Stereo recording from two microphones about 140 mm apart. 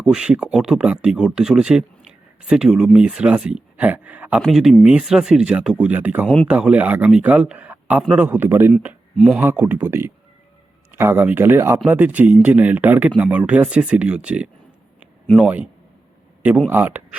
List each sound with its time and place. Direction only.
0.0 s speech: 5° right (ahead or behind)
6.2 s speech: 5° left (ahead or behind)
6.5 s speech: 10° right (ahead or behind)
9.1 s speech: centre (ahead or behind)
9.4 s speech: 15° right (ahead or behind)